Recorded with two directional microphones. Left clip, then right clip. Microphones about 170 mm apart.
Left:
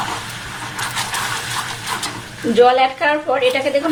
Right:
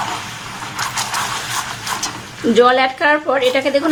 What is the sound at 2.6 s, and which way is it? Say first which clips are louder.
A woman's voice: even; 30° right (ahead or behind).